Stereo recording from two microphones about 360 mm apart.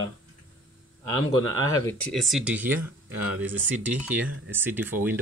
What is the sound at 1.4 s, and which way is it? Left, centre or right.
Speech, right.